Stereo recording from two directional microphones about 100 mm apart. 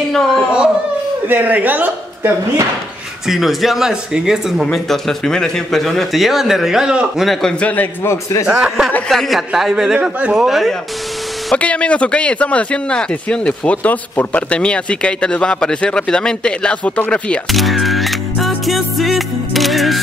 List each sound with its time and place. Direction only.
1.2 s speech: 20° right (ahead or behind)
3.3 s speech: centre (ahead or behind)
7.6 s a man's voice: 15° left (ahead or behind)
8.5 s speech: 10° right (ahead or behind)
11.5 s speech: 15° left (ahead or behind)
17.5 s music: centre (ahead or behind)